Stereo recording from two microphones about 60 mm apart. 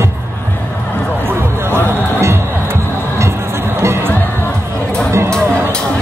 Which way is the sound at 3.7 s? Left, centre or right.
Right.